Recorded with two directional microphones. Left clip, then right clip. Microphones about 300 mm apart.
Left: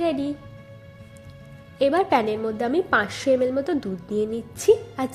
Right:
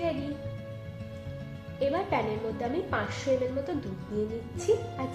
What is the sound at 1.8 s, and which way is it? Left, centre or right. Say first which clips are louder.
A woman's voice: left 9 dB; left.